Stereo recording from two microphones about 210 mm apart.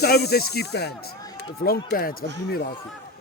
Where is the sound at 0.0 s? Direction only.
50° left (ahead or behind).